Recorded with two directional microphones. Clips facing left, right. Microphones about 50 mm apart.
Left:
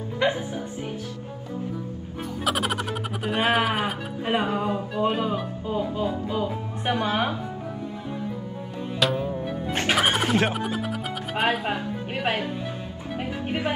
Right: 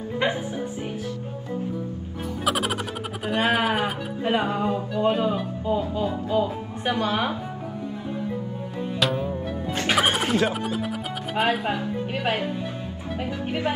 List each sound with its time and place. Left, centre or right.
0.2 s music: centre
2.4 s music: centre
2.9 s speech: centre
4.5 s music: centre
6.4 s speech: centre
9.0 s music: centre
10.1 s music: left
10.8 s music: centre
11.6 s a woman's voice: centre